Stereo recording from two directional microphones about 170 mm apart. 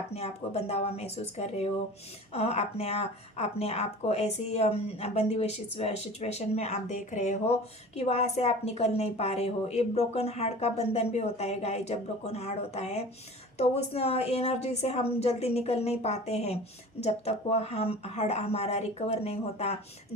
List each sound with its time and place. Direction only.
0.1 s a woman's voice: 40° left (ahead or behind)